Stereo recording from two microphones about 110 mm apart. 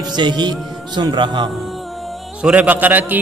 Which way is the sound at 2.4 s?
15° right (ahead or behind).